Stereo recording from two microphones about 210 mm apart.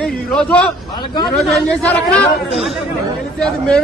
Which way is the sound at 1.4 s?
5° left (ahead or behind).